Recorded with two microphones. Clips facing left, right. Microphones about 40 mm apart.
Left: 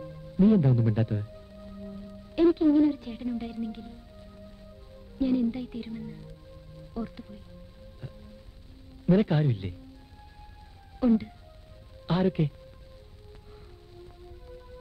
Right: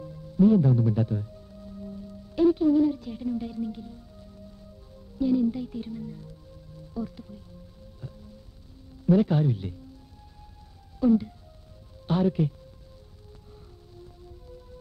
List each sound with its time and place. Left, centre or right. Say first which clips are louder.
0.0 s music: right 2 dB; left
4.9 s speech: right 2 dB; left
9.0 s speech: right 2 dB; left
11.0 s speech: right 2 dB; left
13.9 s music: even; left